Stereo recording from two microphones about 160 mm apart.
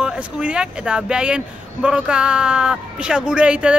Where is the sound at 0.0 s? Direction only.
5° right (ahead or behind).